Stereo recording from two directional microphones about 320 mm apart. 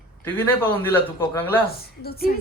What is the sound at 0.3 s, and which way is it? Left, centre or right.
A man's voice, centre.